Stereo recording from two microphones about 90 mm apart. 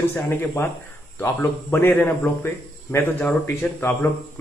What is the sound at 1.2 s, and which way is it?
Speech, 25° left (ahead or behind).